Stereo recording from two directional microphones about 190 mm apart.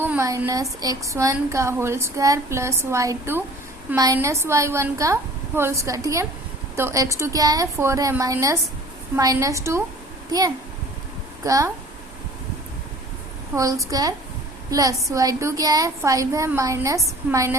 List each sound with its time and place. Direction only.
0.0 s speech: 15° right (ahead or behind)
11.4 s speech: 20° right (ahead or behind)
13.6 s a woman's voice: 15° right (ahead or behind)